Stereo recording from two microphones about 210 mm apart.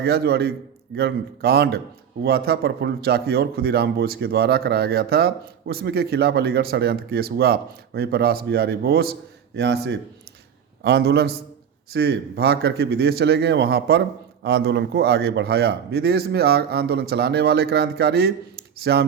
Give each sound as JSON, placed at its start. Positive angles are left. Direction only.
{"t": 0.0, "sound": "a man's voice", "side_deg": -50}